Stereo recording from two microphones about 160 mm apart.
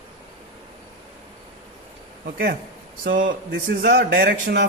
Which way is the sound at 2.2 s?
70° right (ahead or behind).